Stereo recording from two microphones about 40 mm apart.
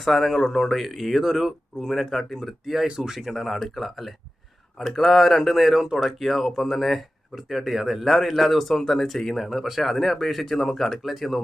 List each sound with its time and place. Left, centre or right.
0.0 s speech: centre
1.9 s speech: centre
2.8 s speech: centre
3.2 s speech: centre
6.1 s speech: centre
11.0 s speech: centre